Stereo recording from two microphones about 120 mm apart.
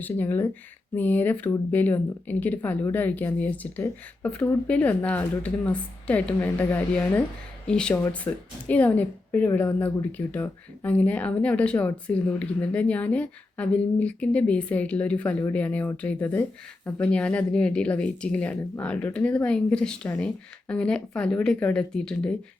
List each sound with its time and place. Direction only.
0.0 s a woman's voice: 15° left (ahead or behind)